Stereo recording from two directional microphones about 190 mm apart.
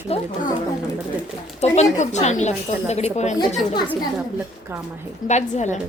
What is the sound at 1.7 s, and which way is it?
Speech, 35° left (ahead or behind).